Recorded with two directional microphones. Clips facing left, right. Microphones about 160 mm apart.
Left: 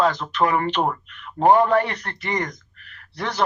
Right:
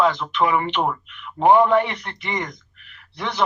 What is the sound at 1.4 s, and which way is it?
Speech, 15° right (ahead or behind).